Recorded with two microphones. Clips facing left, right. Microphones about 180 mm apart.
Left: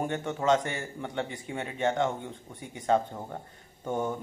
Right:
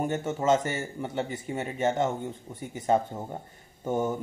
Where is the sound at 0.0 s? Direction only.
5° right (ahead or behind).